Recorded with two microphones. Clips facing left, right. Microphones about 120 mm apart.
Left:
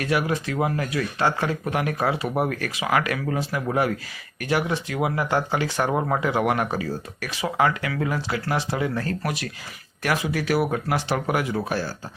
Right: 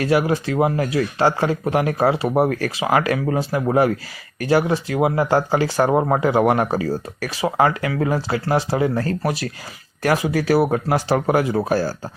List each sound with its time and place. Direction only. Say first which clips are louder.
0.0 s speech: right 6 dB; 30° right (ahead or behind)